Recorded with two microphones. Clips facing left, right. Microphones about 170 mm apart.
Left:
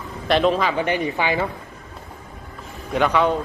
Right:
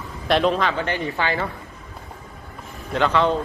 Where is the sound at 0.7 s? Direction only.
15° left (ahead or behind).